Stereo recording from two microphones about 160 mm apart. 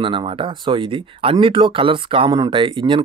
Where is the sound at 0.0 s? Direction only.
30° right (ahead or behind).